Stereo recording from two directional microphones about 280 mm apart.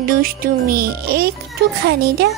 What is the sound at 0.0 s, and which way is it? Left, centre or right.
Music, right.